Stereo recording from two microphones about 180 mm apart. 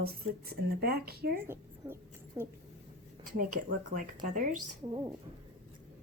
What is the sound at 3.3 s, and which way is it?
Speech, 50° right (ahead or behind).